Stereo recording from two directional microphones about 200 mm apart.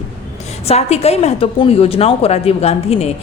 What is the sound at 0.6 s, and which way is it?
A woman's voice, 30° left (ahead or behind).